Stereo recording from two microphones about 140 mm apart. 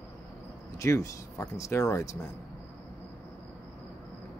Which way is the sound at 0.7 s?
20° left (ahead or behind).